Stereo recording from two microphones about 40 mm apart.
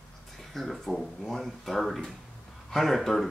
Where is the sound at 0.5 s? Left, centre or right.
Centre.